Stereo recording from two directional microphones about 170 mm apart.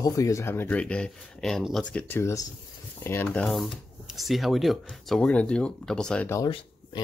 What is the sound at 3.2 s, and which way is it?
Speech, 5° left (ahead or behind).